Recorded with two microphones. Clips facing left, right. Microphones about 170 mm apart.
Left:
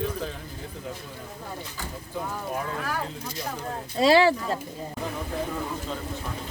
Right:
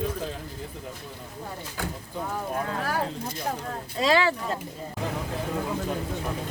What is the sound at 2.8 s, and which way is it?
Speech, 50° right (ahead or behind).